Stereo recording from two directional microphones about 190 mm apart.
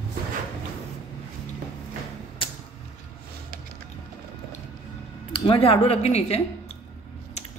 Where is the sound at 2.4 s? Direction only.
25° left (ahead or behind).